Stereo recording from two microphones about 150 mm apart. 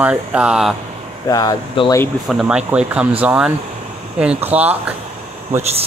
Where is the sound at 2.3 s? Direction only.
5° right (ahead or behind).